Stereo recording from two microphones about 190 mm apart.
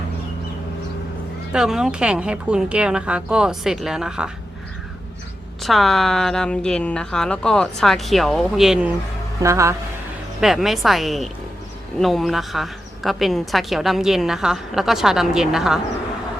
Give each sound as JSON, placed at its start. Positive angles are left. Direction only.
{"t": 1.5, "sound": "a woman's voice", "side_deg": -5}
{"t": 5.6, "sound": "a woman's voice", "side_deg": 0}
{"t": 9.4, "sound": "speech", "side_deg": -15}
{"t": 10.4, "sound": "a woman's voice", "side_deg": 0}